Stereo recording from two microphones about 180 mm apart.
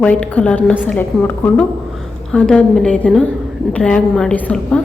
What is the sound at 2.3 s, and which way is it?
A woman's voice, 5° left (ahead or behind).